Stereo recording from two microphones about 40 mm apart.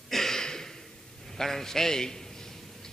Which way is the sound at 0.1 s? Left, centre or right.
Centre.